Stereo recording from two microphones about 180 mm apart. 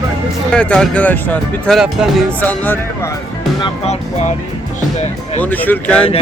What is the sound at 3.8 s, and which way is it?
Speech, 40° left (ahead or behind).